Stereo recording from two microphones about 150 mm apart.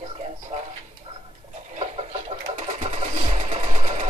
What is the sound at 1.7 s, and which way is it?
Sewing machine, 45° right (ahead or behind).